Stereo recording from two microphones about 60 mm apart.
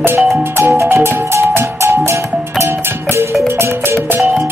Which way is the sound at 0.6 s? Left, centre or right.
Right.